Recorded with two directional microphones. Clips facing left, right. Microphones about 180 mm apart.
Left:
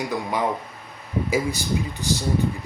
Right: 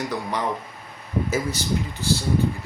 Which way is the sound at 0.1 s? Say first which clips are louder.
Left 2 dB; 10° left (ahead or behind).